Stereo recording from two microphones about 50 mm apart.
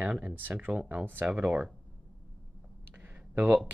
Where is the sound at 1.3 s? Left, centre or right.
Right.